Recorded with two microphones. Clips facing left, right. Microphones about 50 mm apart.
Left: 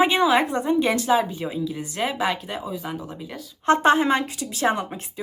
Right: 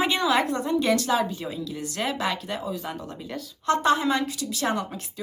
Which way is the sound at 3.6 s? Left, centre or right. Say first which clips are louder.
Left 4 dB; left.